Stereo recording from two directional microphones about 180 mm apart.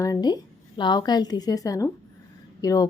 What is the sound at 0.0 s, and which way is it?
A woman's voice, 20° left (ahead or behind).